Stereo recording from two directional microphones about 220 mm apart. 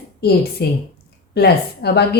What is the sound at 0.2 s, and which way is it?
Speech, 45° left (ahead or behind).